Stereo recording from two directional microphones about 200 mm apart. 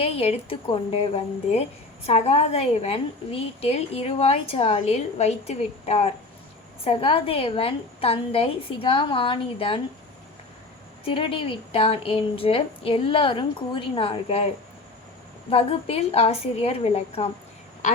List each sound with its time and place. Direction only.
0.0 s a woman's voice: 30° left (ahead or behind)
11.0 s a woman's voice: 25° left (ahead or behind)